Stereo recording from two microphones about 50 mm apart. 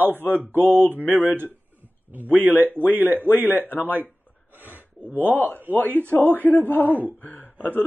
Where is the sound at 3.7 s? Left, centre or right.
Right.